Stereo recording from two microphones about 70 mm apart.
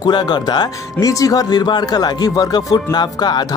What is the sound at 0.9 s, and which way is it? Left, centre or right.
Speech, left.